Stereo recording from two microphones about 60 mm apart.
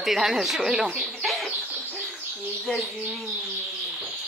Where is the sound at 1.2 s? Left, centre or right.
Centre.